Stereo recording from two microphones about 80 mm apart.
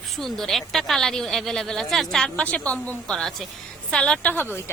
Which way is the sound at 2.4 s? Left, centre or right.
Centre.